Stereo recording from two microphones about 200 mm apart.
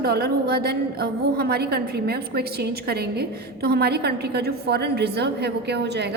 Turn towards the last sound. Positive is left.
turn(degrees=-55)  # may be behind; listen again after turning